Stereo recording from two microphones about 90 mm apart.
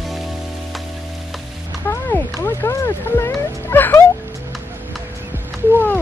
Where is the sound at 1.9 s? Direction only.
25° left (ahead or behind).